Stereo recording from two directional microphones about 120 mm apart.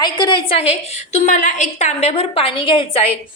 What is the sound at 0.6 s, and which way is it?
A woman's voice, 70° left (ahead or behind).